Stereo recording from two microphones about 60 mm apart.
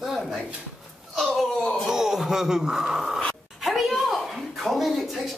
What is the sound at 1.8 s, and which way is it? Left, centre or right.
A woman's voice, centre.